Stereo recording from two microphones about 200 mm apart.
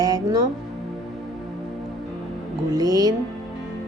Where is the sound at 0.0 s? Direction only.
20° right (ahead or behind).